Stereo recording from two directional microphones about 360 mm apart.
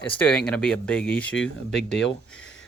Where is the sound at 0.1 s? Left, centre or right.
Centre.